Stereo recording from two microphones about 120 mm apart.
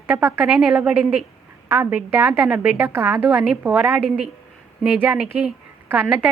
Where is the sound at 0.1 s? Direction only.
15° right (ahead or behind).